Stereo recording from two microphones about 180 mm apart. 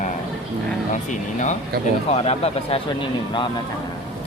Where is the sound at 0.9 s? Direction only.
45° left (ahead or behind); by 3.5 s 25° left (ahead or behind).